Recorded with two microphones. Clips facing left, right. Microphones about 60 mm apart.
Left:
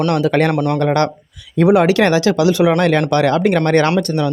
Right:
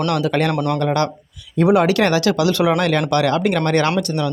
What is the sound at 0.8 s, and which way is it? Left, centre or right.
Speech, left.